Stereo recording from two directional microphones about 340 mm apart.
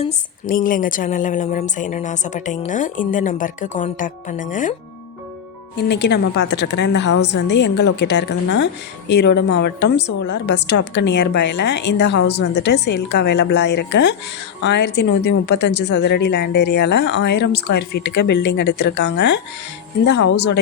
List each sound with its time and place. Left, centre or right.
0.0 s a woman's voice: left
5.7 s a woman's voice: left